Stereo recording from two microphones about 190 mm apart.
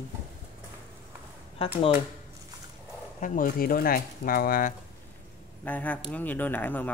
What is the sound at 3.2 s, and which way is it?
Speech, 50° left (ahead or behind).